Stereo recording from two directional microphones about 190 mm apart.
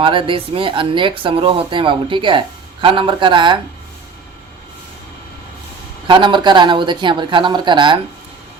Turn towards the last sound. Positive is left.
turn(degrees=-25)  # may be behind; listen again after turning